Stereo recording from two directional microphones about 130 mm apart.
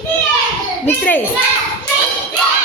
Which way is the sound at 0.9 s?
15° left (ahead or behind).